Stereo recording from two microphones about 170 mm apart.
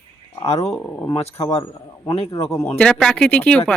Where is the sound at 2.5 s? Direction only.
15° left (ahead or behind).